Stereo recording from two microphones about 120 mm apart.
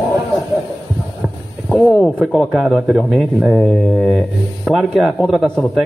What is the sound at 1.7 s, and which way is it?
A man's voice, 5° left (ahead or behind).